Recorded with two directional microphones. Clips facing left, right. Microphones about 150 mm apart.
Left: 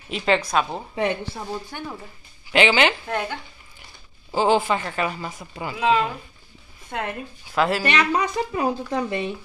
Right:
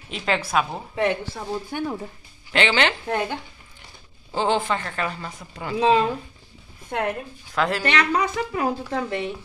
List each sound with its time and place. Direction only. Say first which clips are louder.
0.1 s a woman's voice: left 2 dB; centre (ahead or behind)
0.9 s speech: right 1 dB; 20° left (ahead or behind)
1.5 s speech: right 9 dB; 15° right (ahead or behind)
2.5 s a woman's voice: left 3 dB; 10° left (ahead or behind)
3.1 s speech: right 2 dB; 20° right (ahead or behind)
4.3 s a woman's voice: left 3 dB; 10° left (ahead or behind)
5.8 s speech: right 2 dB; 30° right (ahead or behind)
7.0 s a woman's voice: right 3 dB; 5° left (ahead or behind)